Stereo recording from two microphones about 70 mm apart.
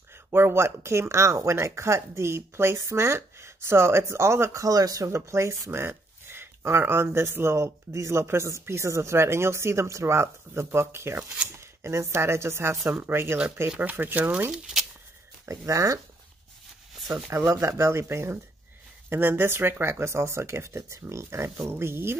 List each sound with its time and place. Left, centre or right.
0.1 s speech: right
5.1 s speech: right
15.4 s speech: right
17.5 s speech: right